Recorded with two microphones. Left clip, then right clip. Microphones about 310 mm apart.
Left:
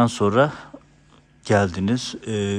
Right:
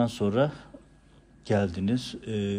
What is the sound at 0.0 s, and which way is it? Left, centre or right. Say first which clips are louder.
A man's voice: left 8 dB; left.